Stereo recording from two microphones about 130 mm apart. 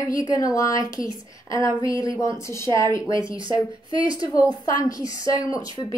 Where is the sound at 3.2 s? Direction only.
40° right (ahead or behind).